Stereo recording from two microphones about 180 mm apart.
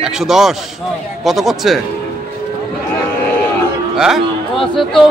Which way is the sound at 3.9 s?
5° right (ahead or behind).